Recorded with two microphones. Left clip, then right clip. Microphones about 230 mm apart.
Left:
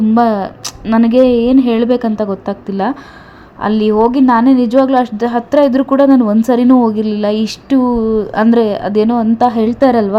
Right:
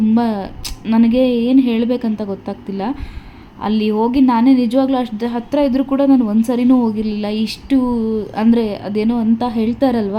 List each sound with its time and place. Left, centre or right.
0.1 s a woman's voice: centre